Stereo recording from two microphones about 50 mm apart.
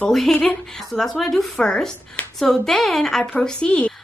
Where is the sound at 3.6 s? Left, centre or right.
Centre.